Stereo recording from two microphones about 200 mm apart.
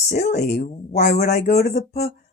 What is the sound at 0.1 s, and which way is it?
Speech, 35° left (ahead or behind).